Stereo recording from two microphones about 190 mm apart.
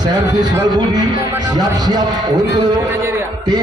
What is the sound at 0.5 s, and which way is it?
Speech, 20° right (ahead or behind).